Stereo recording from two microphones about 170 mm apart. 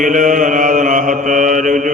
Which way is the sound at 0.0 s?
50° right (ahead or behind).